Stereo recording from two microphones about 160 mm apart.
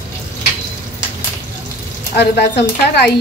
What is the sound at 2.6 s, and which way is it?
Speech, 90° left.